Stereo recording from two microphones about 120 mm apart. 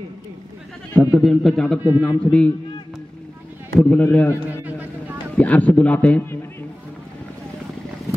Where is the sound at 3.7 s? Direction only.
10° left (ahead or behind).